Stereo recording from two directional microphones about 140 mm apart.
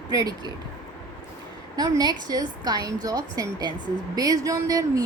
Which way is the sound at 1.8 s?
30° right (ahead or behind).